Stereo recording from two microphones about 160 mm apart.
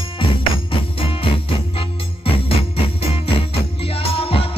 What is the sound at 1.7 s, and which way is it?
Music, 35° left (ahead or behind).